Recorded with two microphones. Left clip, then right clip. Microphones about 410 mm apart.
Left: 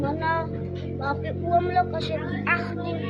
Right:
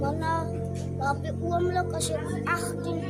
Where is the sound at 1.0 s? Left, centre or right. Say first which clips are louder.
Left 1 dB; right.